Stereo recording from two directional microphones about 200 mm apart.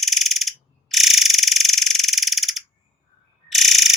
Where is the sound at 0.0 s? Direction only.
Centre (ahead or behind).